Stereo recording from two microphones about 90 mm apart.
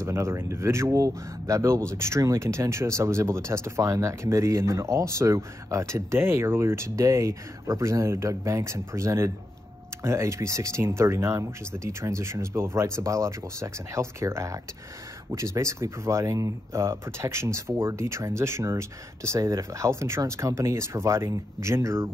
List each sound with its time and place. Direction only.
0.0 s speech: 30° right (ahead or behind)